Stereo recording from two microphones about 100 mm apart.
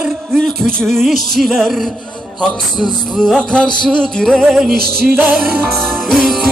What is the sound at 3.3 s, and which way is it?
Music, 10° left (ahead or behind).